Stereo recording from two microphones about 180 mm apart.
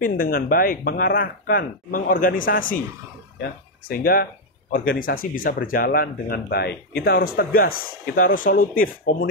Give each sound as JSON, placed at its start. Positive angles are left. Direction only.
{"t": 0.0, "sound": "speech", "side_deg": 55}
{"t": 3.9, "sound": "speech", "side_deg": 55}